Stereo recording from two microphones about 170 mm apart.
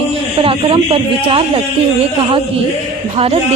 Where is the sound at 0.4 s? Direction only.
30° right (ahead or behind).